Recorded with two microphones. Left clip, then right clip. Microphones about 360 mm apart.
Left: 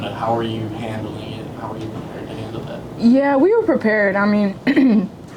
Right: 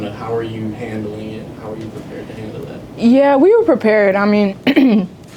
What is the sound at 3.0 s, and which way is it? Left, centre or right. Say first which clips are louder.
Speech: right 4 dB; right.